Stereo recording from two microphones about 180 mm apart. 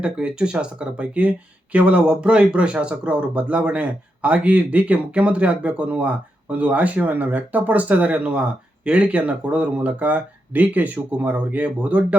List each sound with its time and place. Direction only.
0.0 s speech: 5° right (ahead or behind)